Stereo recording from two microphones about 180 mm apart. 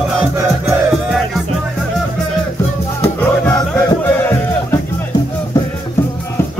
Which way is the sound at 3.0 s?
15° left (ahead or behind).